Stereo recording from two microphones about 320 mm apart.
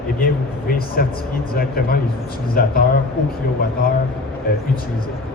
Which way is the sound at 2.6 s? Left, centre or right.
Left.